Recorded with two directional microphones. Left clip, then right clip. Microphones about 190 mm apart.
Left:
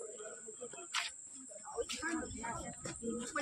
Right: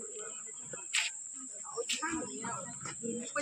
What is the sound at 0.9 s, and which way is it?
Cricket, 20° left (ahead or behind).